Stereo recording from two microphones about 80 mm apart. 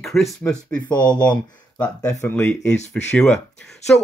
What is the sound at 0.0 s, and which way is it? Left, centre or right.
Speech, centre.